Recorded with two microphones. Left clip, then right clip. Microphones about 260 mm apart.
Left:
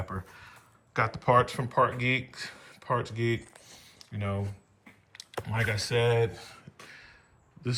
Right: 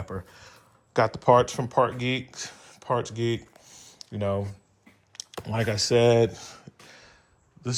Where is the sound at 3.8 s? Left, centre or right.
Centre.